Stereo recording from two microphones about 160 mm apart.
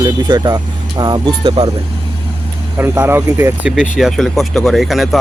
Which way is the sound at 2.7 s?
15° right (ahead or behind).